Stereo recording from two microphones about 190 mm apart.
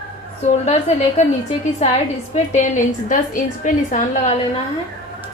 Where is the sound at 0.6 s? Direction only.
35° left (ahead or behind).